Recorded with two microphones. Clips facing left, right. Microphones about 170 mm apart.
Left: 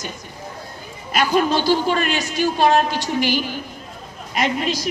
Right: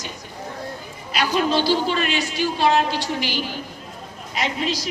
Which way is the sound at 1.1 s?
50° left (ahead or behind).